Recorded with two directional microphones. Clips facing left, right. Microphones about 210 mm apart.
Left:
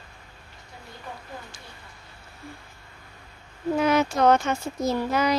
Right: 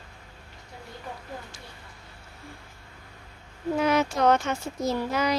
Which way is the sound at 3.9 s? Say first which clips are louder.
Left 2 dB; 50° left (ahead or behind).